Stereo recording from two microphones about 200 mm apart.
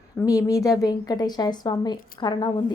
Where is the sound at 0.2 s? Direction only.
15° left (ahead or behind).